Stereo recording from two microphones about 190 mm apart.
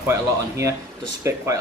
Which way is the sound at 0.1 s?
15° right (ahead or behind).